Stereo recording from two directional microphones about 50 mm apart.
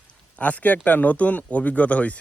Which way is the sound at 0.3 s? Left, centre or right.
Left.